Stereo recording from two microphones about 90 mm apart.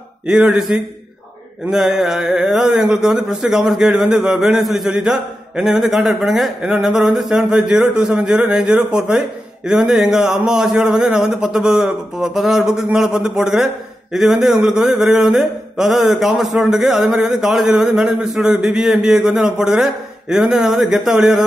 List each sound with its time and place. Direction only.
0.3 s speech: 5° right (ahead or behind)